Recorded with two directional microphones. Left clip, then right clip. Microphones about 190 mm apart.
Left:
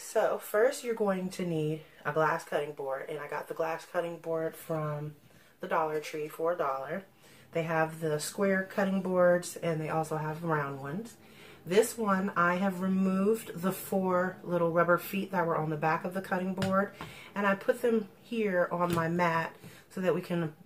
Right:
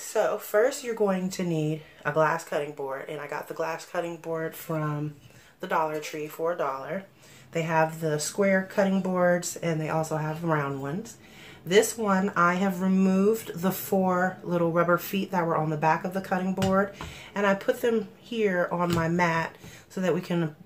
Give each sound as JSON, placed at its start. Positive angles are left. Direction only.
{"t": 0.1, "sound": "speech", "side_deg": -35}
{"t": 5.6, "sound": "speech", "side_deg": -40}